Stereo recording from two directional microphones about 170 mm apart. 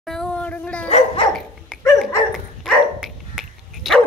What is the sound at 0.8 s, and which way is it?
Dog, 40° left (ahead or behind).